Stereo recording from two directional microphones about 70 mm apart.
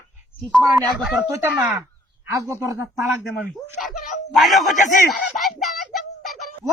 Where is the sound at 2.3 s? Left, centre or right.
Right.